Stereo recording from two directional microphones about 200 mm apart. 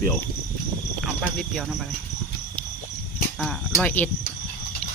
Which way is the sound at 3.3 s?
5° left (ahead or behind).